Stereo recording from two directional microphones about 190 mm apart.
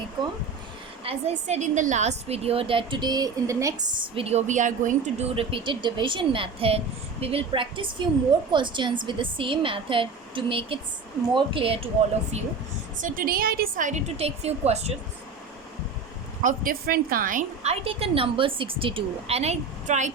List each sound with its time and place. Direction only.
1.0 s a woman's voice: 35° right (ahead or behind)
13.0 s a woman's voice: 45° right (ahead or behind)
16.4 s a woman's voice: 45° right (ahead or behind)